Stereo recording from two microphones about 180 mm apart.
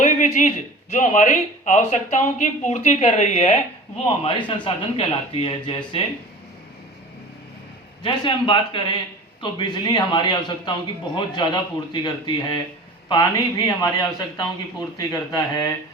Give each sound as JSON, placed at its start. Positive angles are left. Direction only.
{"t": 0.0, "sound": "a sound", "side_deg": 45}
{"t": 0.9, "sound": "speech", "side_deg": 45}
{"t": 8.0, "sound": "a man's voice", "side_deg": 25}